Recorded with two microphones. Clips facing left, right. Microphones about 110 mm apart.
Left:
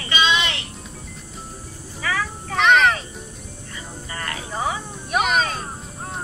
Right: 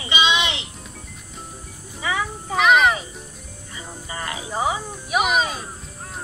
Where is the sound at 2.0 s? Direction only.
20° right (ahead or behind).